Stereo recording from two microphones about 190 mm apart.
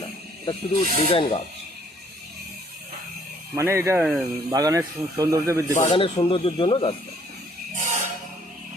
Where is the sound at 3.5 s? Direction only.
15° right (ahead or behind).